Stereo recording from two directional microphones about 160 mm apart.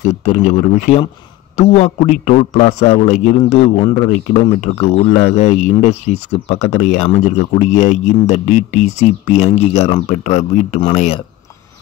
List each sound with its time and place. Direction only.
0.0 s speech: 50° left (ahead or behind)
1.6 s a man's voice: 40° left (ahead or behind)